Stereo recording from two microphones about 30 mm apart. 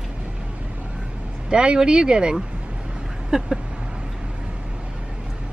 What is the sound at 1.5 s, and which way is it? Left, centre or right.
Speech, right.